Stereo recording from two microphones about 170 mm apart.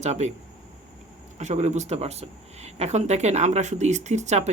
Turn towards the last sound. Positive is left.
turn(degrees=-40)  # may be behind; listen again after turning